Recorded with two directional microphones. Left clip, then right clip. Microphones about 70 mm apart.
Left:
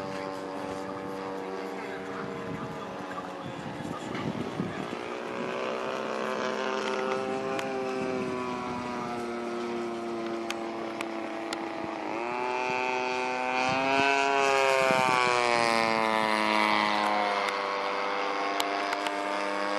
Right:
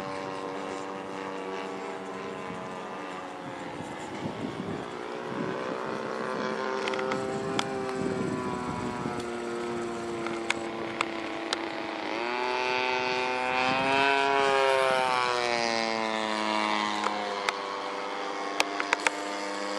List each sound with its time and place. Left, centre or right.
6.4 s vehicle: left
12.3 s vehicle: centre